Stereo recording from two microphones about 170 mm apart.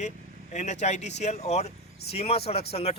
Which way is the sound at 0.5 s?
45° left (ahead or behind).